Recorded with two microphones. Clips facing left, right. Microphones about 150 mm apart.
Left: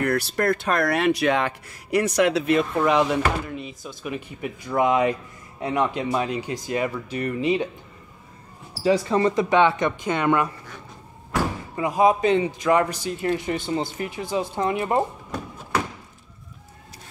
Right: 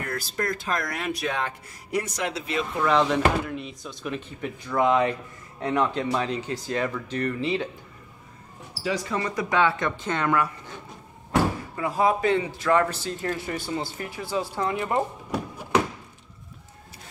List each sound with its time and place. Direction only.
0.0 s speech: 70° left (ahead or behind)
2.8 s speech: 10° left (ahead or behind)
3.4 s speech: centre (ahead or behind)
8.8 s a man's voice: 30° left (ahead or behind)
11.7 s a man's voice: 15° left (ahead or behind)